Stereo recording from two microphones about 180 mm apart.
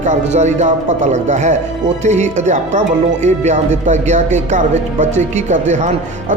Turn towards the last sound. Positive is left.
turn(degrees=-40)  # may be behind; listen again after turning